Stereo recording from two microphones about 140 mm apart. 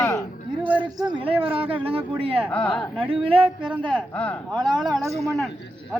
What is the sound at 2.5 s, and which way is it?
Speech, 5° left (ahead or behind).